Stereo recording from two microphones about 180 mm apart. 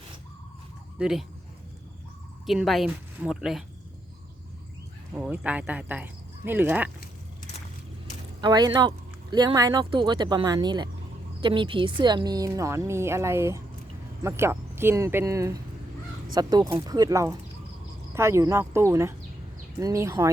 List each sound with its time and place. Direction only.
0.9 s speech: 5° right (ahead or behind)
2.5 s speech: centre (ahead or behind)
5.1 s speech: 10° right (ahead or behind)
8.4 s speech: 25° right (ahead or behind)